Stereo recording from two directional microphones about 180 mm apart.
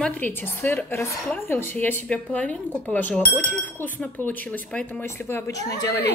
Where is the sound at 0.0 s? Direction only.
10° left (ahead or behind).